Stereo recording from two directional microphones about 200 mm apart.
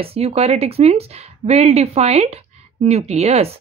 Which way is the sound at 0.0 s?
30° right (ahead or behind).